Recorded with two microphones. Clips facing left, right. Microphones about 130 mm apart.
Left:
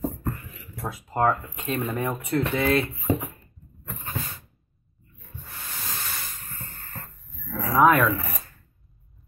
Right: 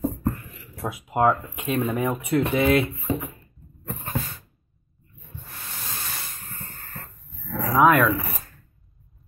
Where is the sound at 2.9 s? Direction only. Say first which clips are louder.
Left 2 dB; 30° left (ahead or behind).